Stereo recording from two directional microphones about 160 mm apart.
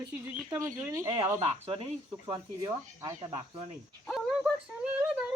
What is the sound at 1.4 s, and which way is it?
Speech, 35° right (ahead or behind).